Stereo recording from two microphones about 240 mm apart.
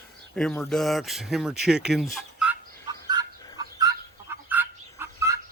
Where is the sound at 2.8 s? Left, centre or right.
Centre.